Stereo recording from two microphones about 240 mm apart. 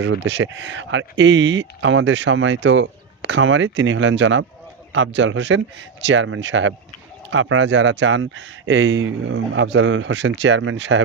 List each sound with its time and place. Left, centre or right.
0.0 s speech: right